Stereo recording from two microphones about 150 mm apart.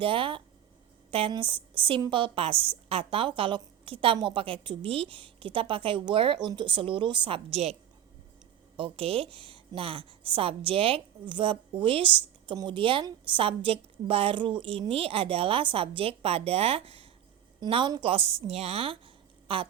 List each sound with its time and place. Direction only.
0.0 s a woman's voice: 35° right (ahead or behind)